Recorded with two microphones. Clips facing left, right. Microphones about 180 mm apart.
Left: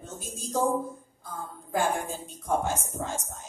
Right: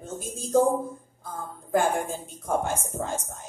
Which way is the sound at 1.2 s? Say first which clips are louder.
Right 2 dB; 55° right (ahead or behind).